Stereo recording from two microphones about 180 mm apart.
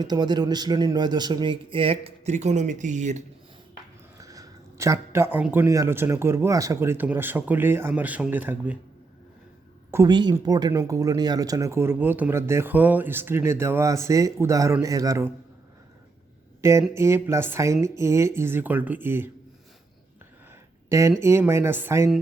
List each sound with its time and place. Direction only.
0.0 s a man's voice: 25° right (ahead or behind); by 3.2 s 40° right (ahead or behind)
4.2 s speech: 20° right (ahead or behind)
9.9 s speech: 20° right (ahead or behind)
16.6 s speech: 15° right (ahead or behind)
21.2 s speech: 15° right (ahead or behind)